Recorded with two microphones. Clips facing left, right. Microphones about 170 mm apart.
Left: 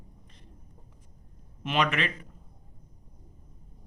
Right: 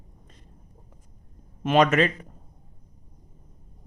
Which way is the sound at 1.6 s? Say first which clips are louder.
Right 8 dB; 45° right (ahead or behind).